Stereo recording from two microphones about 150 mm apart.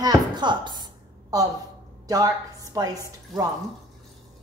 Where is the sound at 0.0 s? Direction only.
30° right (ahead or behind).